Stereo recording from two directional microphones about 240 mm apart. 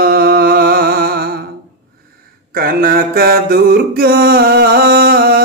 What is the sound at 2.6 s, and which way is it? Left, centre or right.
Mantra, right.